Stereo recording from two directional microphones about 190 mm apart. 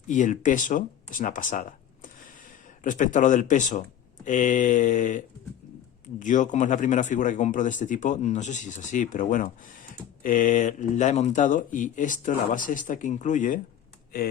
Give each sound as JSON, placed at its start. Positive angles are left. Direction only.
{"t": 0.1, "sound": "a man's voice", "side_deg": 40}